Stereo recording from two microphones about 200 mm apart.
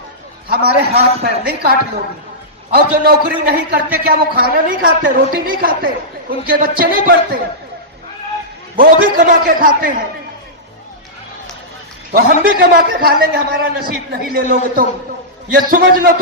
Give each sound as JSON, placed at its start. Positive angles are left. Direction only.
{"t": 0.4, "sound": "a man's voice", "side_deg": -50}
{"t": 2.7, "sound": "a man's voice", "side_deg": -50}
{"t": 8.7, "sound": "a man's voice", "side_deg": -45}
{"t": 12.1, "sound": "a man's voice", "side_deg": -45}